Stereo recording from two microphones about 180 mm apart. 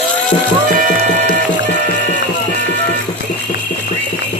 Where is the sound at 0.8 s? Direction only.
45° right (ahead or behind).